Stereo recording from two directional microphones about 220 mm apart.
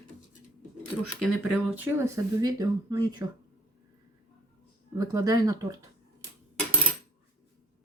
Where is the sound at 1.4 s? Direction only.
5° right (ahead or behind).